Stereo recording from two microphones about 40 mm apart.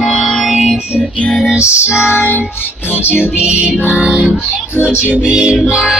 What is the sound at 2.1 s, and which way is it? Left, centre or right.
Music, left.